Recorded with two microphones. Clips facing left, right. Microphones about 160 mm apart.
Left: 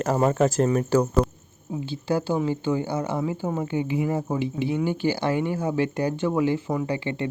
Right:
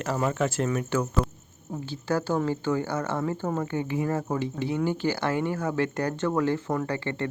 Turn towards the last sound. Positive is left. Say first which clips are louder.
# left 2 dB
turn(degrees=15)  # may be behind; listen again after turning